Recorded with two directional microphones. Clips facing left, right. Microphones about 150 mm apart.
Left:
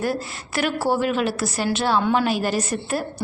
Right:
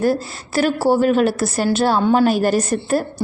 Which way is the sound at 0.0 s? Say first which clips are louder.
Right 6 dB; 35° right (ahead or behind).